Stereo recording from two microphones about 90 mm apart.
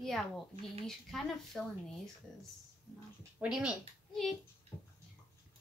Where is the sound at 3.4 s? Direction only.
10° right (ahead or behind).